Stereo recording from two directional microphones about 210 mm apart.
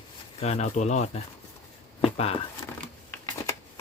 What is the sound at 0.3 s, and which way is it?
Speech, 30° left (ahead or behind).